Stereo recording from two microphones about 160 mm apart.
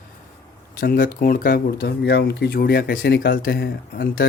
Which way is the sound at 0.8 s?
65° left (ahead or behind).